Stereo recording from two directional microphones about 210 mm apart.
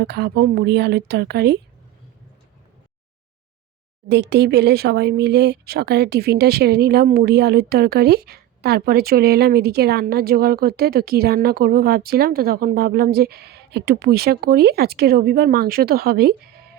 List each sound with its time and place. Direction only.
0.0 s speech: 50° right (ahead or behind)
4.1 s speech: 55° right (ahead or behind)